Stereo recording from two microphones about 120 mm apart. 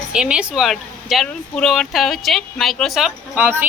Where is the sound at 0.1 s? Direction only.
10° right (ahead or behind).